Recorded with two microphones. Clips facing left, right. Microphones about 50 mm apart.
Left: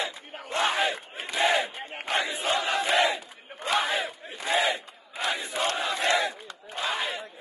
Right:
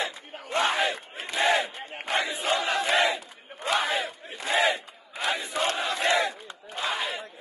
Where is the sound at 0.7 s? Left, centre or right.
Left.